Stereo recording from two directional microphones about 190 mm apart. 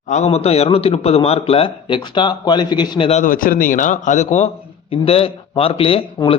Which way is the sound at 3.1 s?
45° left (ahead or behind).